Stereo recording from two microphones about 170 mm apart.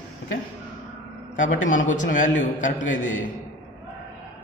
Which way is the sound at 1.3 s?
50° left (ahead or behind).